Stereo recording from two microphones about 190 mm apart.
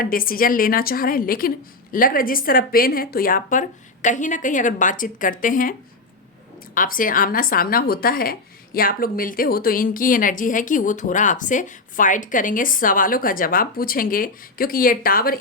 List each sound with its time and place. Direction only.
0.0 s speech: 50° left (ahead or behind)
6.7 s speech: 45° left (ahead or behind)